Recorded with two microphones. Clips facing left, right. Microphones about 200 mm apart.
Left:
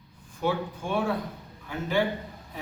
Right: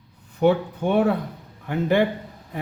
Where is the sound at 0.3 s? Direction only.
65° right (ahead or behind).